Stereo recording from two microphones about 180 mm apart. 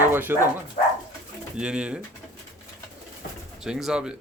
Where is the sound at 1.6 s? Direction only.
5° right (ahead or behind).